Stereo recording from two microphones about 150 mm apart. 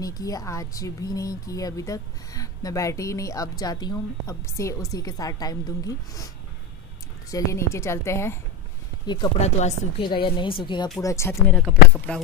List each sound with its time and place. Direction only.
0.0 s speech: 25° left (ahead or behind)
9.0 s speech: 30° left (ahead or behind)
9.4 s speech: 50° left (ahead or behind)
10.0 s speech: 35° left (ahead or behind)
12.1 s speech: 5° left (ahead or behind)